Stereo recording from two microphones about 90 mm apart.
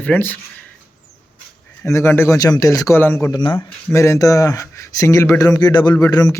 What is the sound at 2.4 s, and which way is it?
Speech, 40° left (ahead or behind).